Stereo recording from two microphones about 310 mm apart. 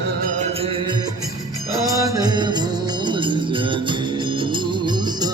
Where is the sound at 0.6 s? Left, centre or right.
Centre.